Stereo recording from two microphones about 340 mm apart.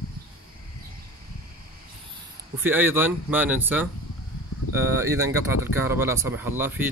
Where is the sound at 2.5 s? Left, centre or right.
Centre.